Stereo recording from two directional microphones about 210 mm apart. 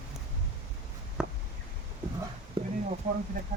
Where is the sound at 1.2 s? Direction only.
5° right (ahead or behind).